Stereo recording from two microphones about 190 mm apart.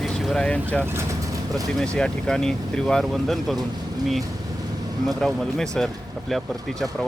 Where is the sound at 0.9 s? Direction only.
15° right (ahead or behind).